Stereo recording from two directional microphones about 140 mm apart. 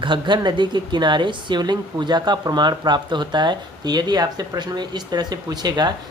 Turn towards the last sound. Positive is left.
turn(degrees=-30)  # may be behind; listen again after turning